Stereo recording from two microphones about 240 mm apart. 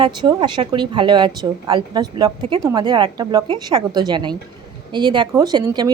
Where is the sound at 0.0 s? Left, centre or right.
Centre.